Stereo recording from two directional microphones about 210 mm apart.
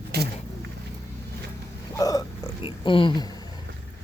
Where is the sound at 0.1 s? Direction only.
50° right (ahead or behind).